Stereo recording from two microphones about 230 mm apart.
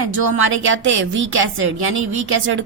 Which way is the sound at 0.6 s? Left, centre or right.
Right.